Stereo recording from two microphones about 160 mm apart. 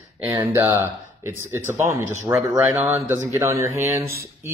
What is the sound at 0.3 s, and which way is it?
Speech, 20° right (ahead or behind).